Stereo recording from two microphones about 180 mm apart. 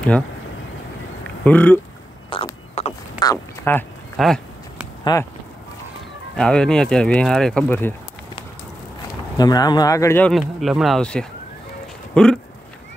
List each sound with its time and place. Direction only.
1.4 s speech: 10° left (ahead or behind)
2.2 s mechanisms: 30° left (ahead or behind)
3.2 s a sound: 15° left (ahead or behind)
4.2 s a sound: centre (ahead or behind)
5.1 s speech: 25° left (ahead or behind)
6.3 s speech: 5° left (ahead or behind)
9.4 s speech: 20° left (ahead or behind)
10.3 s speech: centre (ahead or behind)